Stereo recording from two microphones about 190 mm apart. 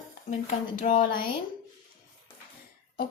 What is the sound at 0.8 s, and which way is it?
Speech, 45° left (ahead or behind).